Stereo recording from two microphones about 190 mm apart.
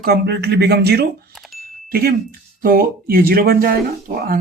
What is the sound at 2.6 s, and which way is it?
A man's voice, 50° right (ahead or behind).